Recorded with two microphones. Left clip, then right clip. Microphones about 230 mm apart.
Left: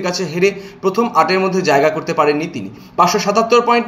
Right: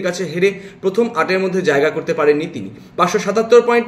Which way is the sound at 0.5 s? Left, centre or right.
Right.